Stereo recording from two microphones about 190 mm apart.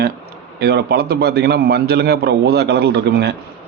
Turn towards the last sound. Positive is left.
turn(degrees=-60)  # may be behind; listen again after turning